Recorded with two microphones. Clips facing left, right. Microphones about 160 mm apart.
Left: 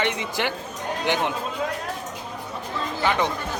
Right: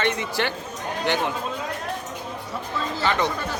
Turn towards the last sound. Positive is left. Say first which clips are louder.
# left 1 dB
turn(degrees=15)  # may be behind; listen again after turning